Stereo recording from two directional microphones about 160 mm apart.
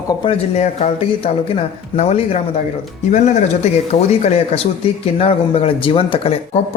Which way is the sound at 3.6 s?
45° left (ahead or behind).